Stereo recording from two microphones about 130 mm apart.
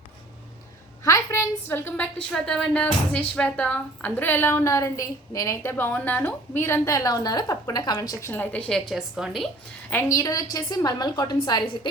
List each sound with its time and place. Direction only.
1.0 s a woman's voice: 25° left (ahead or behind)
2.3 s speech: 5° left (ahead or behind); by 5.7 s 30° left (ahead or behind)
5.7 s a woman's voice: 15° left (ahead or behind)
8.3 s a woman's voice: 10° left (ahead or behind)
9.9 s a woman's voice: 25° left (ahead or behind)